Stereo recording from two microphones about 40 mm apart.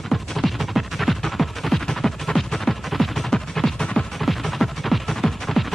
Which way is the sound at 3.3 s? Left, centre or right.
Centre.